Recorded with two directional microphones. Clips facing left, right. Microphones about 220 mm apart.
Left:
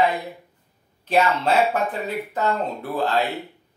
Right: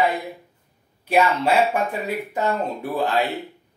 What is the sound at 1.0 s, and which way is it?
Speech, 10° right (ahead or behind).